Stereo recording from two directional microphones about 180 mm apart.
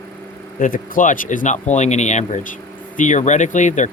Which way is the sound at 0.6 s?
50° left (ahead or behind).